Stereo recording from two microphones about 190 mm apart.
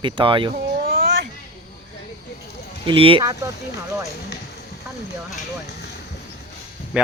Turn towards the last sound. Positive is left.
turn(degrees=0)  # may be behind; listen again after turning